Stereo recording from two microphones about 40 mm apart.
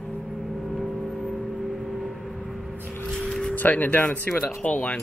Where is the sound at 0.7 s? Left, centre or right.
Centre.